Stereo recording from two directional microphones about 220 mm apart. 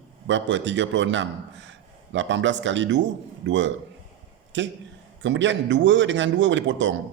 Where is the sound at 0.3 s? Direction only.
55° right (ahead or behind).